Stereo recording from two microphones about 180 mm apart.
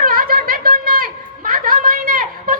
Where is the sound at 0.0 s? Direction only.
50° right (ahead or behind).